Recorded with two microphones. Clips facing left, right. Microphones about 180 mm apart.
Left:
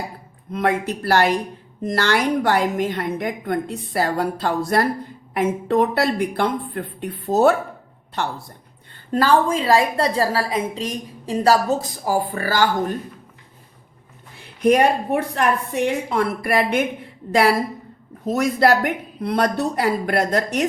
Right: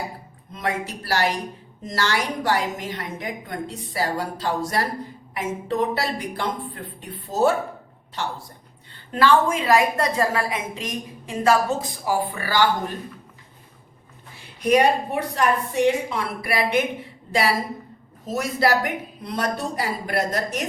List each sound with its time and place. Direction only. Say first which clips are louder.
0.5 s a woman's voice: left 6 dB; 60° left (ahead or behind)
9.1 s a woman's voice: left 1 dB; 40° left (ahead or behind)
14.6 s a woman's voice: left 2 dB; 55° left (ahead or behind)
18.3 s a woman's voice: left 4 dB; 60° left (ahead or behind)